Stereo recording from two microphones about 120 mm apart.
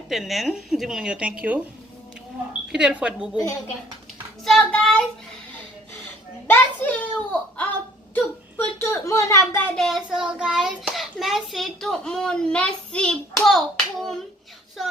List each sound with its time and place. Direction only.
0.1 s speech: centre (ahead or behind)
4.4 s child singing: 5° left (ahead or behind)
6.5 s a sound: 15° left (ahead or behind)
8.1 s whimper: 20° left (ahead or behind)
9.7 s a child's voice: centre (ahead or behind)